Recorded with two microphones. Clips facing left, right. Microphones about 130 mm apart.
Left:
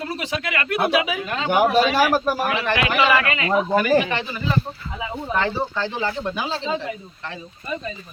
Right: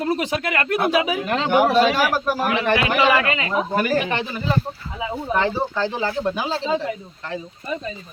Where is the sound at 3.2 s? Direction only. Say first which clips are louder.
Right 1 dB; 30° right (ahead or behind).